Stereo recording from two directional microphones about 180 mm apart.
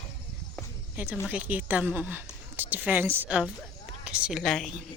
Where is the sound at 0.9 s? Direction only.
10° right (ahead or behind).